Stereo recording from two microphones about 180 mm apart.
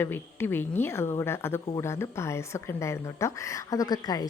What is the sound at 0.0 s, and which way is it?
Speech, 10° left (ahead or behind).